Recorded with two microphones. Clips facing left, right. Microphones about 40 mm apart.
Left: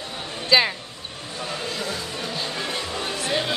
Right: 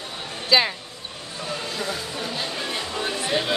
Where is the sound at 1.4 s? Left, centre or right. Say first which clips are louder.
Even; centre.